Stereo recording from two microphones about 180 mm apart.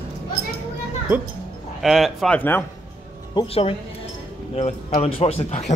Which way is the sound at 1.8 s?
Centre (ahead or behind).